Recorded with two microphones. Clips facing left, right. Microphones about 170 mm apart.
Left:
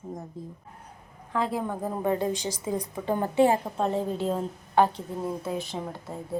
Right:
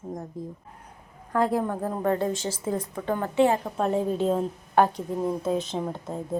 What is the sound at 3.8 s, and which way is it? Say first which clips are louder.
A woman's voice: right 3 dB; 15° right (ahead or behind).